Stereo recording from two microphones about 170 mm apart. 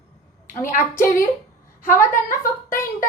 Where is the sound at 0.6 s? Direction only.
55° left (ahead or behind).